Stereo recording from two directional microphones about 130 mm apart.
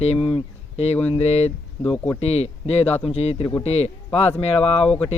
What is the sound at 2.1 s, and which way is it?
Speech, 55° left (ahead or behind).